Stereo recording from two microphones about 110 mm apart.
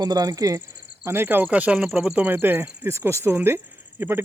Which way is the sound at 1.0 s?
20° right (ahead or behind).